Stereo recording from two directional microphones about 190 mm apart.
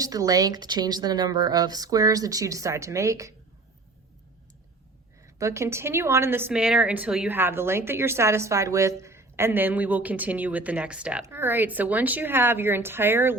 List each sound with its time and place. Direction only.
0.0 s speech: 20° right (ahead or behind)
5.4 s a woman's voice: 15° right (ahead or behind)